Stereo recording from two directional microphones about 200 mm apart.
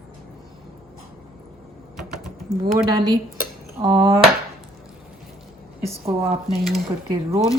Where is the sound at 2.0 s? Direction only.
Centre (ahead or behind).